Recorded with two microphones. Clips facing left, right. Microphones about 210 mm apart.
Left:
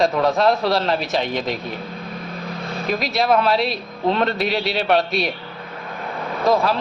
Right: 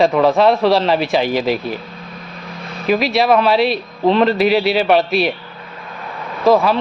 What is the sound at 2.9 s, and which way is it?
Speech, centre (ahead or behind).